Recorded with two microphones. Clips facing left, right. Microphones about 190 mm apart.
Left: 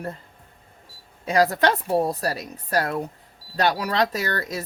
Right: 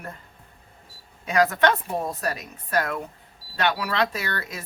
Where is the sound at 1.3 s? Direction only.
35° left (ahead or behind).